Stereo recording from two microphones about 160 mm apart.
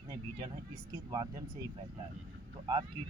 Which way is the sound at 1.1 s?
25° right (ahead or behind).